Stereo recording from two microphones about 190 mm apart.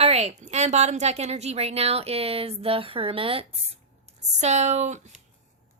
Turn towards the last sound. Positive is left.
turn(degrees=-35)  # may be behind; listen again after turning